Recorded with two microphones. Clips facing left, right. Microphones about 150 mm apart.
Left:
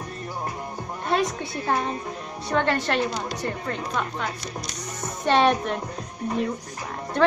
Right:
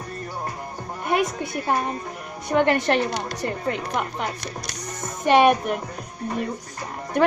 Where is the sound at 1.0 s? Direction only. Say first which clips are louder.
Right 1 dB; 15° right (ahead or behind).